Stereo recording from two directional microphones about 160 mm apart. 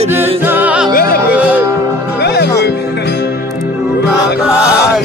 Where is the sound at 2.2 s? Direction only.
90° left.